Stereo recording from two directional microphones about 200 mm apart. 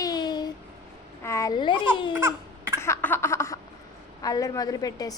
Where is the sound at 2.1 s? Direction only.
10° right (ahead or behind).